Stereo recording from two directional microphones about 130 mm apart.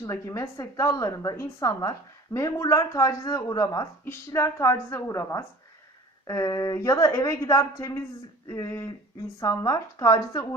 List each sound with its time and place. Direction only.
0.0 s a woman's voice: 25° left (ahead or behind)